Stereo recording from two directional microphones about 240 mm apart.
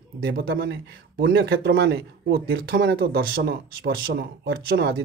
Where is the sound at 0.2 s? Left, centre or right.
Right.